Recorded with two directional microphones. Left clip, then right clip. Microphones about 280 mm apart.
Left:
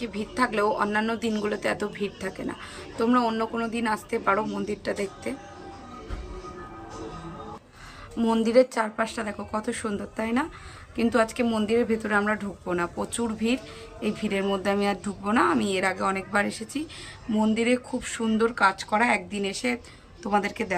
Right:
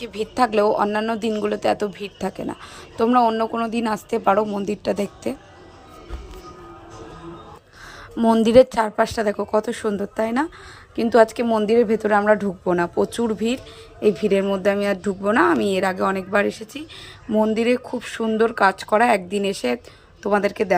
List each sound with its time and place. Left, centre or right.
0.0 s a woman's voice: right
8.1 s a woman's voice: centre